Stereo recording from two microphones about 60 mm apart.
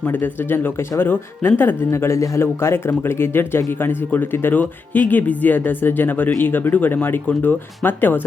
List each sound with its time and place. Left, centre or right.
0.0 s speech: left